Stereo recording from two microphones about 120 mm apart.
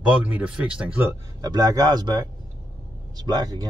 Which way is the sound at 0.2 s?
10° right (ahead or behind).